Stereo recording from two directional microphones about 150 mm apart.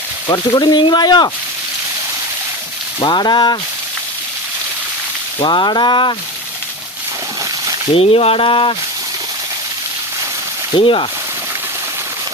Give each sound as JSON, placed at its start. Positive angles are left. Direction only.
{"t": 0.3, "sound": "speech", "side_deg": 25}
{"t": 3.0, "sound": "speech", "side_deg": 30}
{"t": 5.4, "sound": "speech", "side_deg": 30}
{"t": 7.9, "sound": "speech", "side_deg": 40}
{"t": 10.8, "sound": "speech", "side_deg": 35}